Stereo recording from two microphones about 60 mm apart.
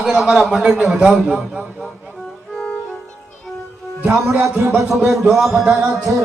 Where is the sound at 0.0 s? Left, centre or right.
Centre.